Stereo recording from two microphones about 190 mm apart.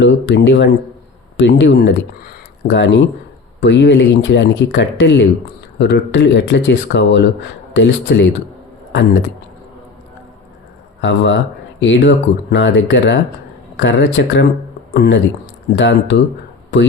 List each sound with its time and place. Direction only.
0.0 s speech: 65° left (ahead or behind)
11.8 s speech: 70° left (ahead or behind)
14.9 s speech: 55° left (ahead or behind)
15.7 s speech: 65° left (ahead or behind)